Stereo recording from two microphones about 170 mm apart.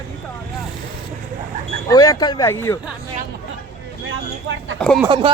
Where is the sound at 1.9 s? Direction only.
20° left (ahead or behind).